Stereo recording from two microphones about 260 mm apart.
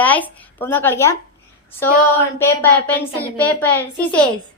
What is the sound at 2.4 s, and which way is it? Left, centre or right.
A woman's voice, centre.